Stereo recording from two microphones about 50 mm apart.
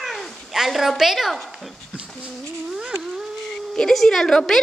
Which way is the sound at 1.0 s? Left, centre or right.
Centre.